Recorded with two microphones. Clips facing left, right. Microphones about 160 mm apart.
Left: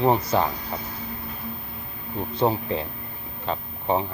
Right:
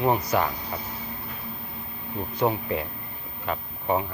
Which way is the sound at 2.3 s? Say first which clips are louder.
Left 2 dB; 25° left (ahead or behind).